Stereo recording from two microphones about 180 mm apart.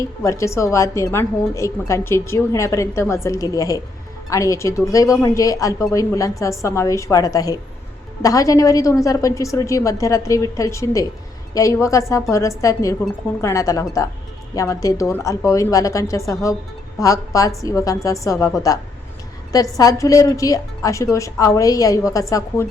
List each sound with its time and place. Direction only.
0.2 s a woman's voice: 15° left (ahead or behind)
19.7 s a woman's voice: 20° left (ahead or behind)